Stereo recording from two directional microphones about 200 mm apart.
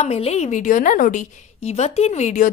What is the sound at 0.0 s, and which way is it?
A woman's voice, 30° left (ahead or behind).